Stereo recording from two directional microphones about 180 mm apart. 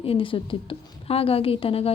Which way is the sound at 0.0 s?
30° left (ahead or behind).